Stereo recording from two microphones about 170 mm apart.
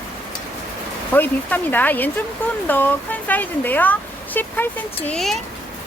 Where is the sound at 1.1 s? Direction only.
10° left (ahead or behind).